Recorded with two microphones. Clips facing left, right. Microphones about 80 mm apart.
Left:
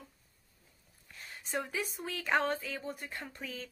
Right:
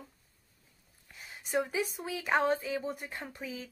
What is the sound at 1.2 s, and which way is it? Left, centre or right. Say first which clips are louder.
A woman's voice: right 5 dB; centre.